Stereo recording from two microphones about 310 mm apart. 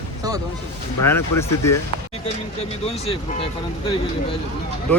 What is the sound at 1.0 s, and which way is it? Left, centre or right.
Speech, centre.